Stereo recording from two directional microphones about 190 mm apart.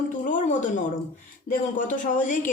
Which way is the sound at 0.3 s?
40° left (ahead or behind).